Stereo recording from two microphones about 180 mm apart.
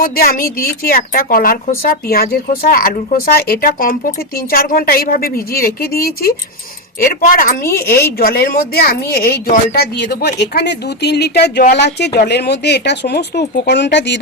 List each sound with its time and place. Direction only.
0.0 s a woman's voice: 55° left (ahead or behind); by 14.2 s 80° left